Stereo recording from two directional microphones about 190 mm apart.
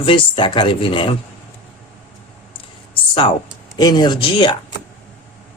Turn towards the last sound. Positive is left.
turn(degrees=25)  # may be behind; listen again after turning